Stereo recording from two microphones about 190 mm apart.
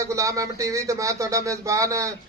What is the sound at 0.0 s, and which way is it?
Speech, 15° right (ahead or behind).